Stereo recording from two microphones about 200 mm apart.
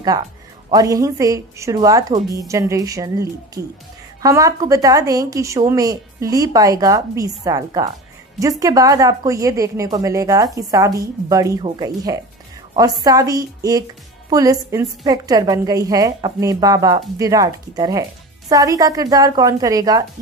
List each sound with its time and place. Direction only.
0.7 s a woman's voice: 20° right (ahead or behind)